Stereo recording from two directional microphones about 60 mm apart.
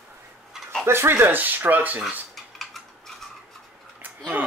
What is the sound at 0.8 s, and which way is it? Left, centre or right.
Speech, right.